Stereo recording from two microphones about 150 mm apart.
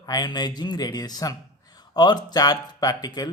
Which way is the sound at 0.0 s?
25° left (ahead or behind).